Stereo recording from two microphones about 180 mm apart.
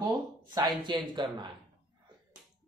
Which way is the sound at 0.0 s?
20° right (ahead or behind).